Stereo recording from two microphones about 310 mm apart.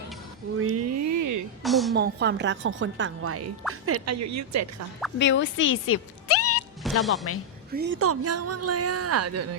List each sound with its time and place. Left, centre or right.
0.5 s a sound: right
1.6 s a sound: centre
2.0 s a woman's voice: right
5.1 s speech: left
6.8 s music: centre
7.3 s a woman's voice: left
7.7 s a woman's voice: right
7.9 s speech: right